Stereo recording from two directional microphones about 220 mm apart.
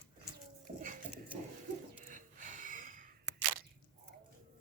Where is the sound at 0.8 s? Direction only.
35° right (ahead or behind).